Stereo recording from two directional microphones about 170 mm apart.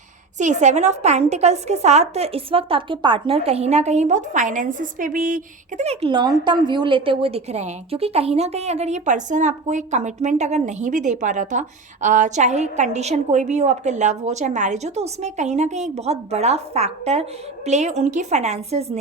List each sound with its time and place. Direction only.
0.3 s a woman's voice: 45° right (ahead or behind)